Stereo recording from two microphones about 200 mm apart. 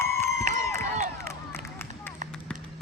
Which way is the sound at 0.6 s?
15° left (ahead or behind).